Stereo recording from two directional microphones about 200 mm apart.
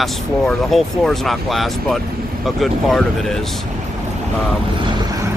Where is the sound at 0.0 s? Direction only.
Centre (ahead or behind).